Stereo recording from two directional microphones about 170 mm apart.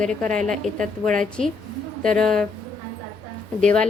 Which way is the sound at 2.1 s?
5° left (ahead or behind).